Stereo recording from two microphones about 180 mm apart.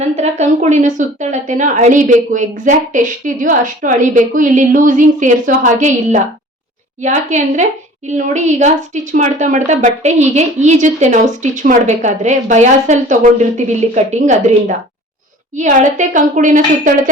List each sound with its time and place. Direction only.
0.0 s a woman's voice: 40° right (ahead or behind)
15.5 s a woman's voice: 45° right (ahead or behind)